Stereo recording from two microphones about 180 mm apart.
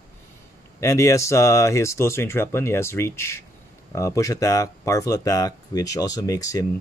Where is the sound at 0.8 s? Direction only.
15° left (ahead or behind).